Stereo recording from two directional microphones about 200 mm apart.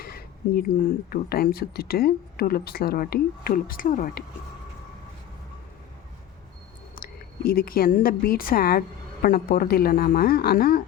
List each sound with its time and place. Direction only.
0.0 s a sound: 50° left (ahead or behind)
1.1 s speech: 50° left (ahead or behind)
6.9 s speech: 45° left (ahead or behind)